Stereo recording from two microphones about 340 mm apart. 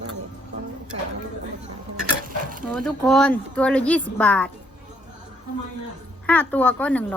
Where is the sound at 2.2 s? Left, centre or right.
Right.